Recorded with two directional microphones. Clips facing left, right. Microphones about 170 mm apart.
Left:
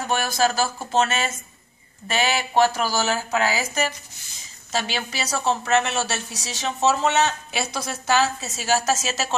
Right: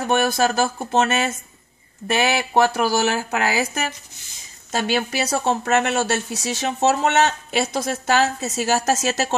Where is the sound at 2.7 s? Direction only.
60° right (ahead or behind).